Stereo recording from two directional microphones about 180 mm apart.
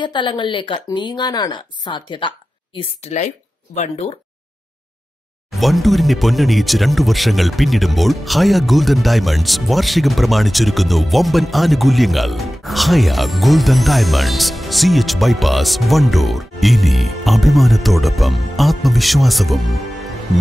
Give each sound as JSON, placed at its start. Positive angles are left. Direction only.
{"t": 0.0, "sound": "a woman's voice", "side_deg": 25}
{"t": 5.5, "sound": "speech", "side_deg": 0}